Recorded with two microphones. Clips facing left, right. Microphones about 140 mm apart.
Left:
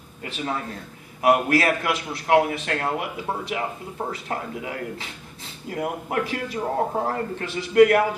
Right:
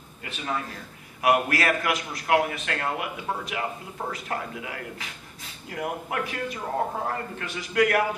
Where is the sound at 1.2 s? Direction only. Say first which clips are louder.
Left 3 dB; 30° left (ahead or behind).